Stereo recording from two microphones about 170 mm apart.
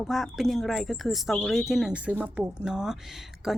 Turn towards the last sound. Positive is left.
turn(degrees=0)  # may be behind; listen again after turning